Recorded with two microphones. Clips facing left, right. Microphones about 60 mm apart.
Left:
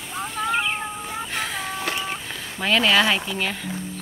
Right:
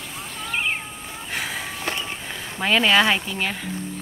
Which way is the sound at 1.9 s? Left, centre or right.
Centre.